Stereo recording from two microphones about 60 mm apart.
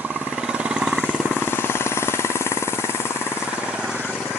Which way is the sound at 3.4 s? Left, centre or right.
Centre.